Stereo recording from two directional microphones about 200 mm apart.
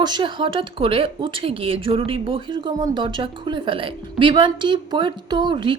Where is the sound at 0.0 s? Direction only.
20° right (ahead or behind).